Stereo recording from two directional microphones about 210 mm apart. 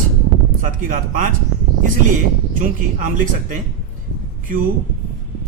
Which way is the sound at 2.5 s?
40° right (ahead or behind).